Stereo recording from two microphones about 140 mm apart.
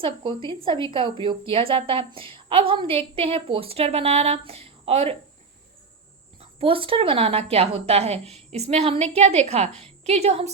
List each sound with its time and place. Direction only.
0.0 s a woman's voice: 35° right (ahead or behind)
6.4 s a woman's voice: 40° right (ahead or behind)